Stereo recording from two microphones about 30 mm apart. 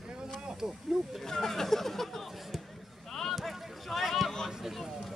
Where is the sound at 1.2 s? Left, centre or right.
Centre.